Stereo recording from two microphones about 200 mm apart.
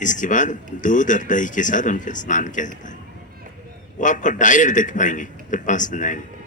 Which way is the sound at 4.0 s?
40° left (ahead or behind).